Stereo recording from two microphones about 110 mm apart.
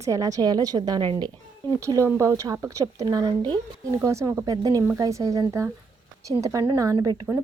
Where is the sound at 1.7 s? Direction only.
30° right (ahead or behind).